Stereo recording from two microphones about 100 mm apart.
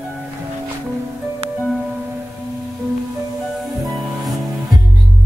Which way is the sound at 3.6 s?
Centre (ahead or behind).